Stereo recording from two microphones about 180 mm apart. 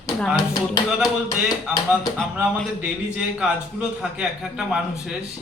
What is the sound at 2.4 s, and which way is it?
A man's voice, 5° right (ahead or behind).